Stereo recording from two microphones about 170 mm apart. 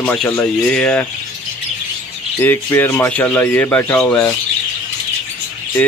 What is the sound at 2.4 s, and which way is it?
Speech, 15° left (ahead or behind).